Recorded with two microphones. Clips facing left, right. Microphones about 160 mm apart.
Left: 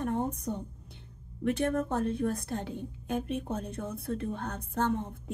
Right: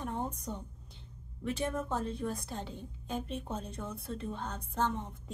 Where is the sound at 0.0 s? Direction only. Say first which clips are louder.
Left 6 dB; 55° left (ahead or behind).